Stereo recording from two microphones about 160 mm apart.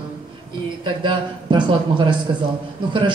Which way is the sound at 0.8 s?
30° right (ahead or behind).